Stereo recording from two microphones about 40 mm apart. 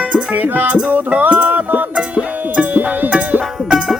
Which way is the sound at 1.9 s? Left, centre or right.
Right.